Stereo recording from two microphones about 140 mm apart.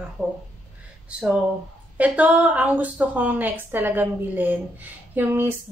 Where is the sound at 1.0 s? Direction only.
5° right (ahead or behind).